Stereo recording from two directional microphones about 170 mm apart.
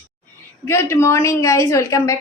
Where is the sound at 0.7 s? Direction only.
15° left (ahead or behind).